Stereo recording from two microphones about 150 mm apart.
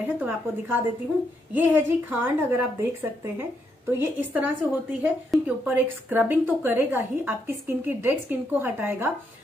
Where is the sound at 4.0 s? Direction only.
15° right (ahead or behind).